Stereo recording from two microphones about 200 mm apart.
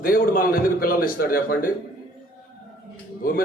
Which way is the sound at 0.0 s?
45° left (ahead or behind).